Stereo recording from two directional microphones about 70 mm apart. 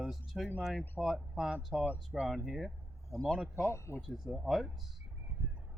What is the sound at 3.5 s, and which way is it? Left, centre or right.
Speech, left.